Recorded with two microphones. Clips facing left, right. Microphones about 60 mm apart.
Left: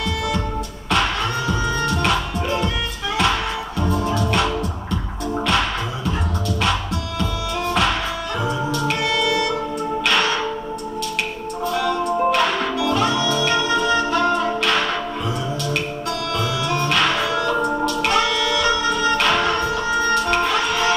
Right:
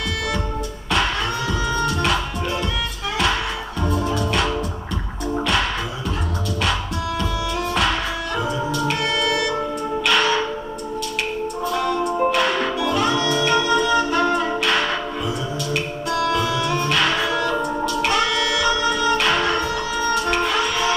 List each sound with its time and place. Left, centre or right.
4.0 s music: centre
12.2 s music: centre
13.0 s music: right
16.1 s music: right